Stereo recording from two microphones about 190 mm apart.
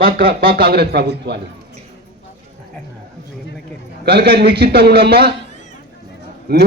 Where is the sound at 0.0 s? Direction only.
50° right (ahead or behind).